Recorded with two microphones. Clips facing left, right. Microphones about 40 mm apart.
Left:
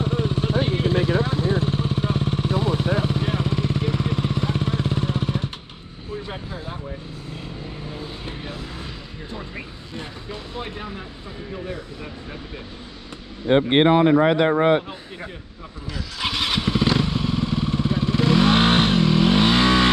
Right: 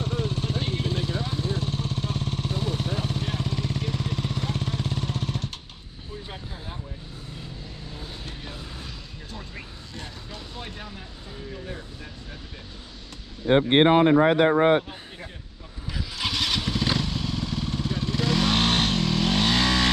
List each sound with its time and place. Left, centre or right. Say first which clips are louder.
0.0 s vehicle: left 5 dB; centre
7.3 s vehicle: left 7 dB; left
9.9 s vehicle: left 6 dB; centre
13.5 s speech: left 2 dB; centre
16.2 s motorcycle: left 3 dB; centre